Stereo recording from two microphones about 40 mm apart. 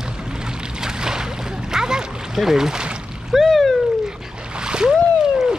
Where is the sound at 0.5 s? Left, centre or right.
Centre.